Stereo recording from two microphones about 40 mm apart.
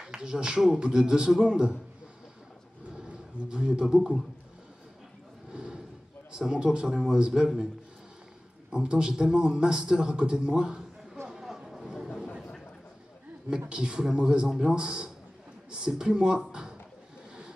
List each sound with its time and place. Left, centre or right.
0.0 s a man's voice: right
3.1 s a man's voice: right
5.5 s a sound: right
6.3 s a man's voice: centre
8.7 s a man's voice: right
11.2 s a sound: centre
13.7 s a man's voice: right